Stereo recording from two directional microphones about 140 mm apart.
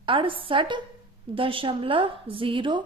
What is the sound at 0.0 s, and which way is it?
A woman's voice, 40° right (ahead or behind).